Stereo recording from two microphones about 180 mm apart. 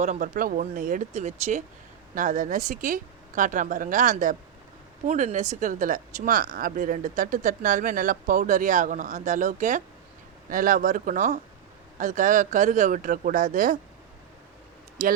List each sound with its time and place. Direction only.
0.0 s a woman's voice: 40° right (ahead or behind)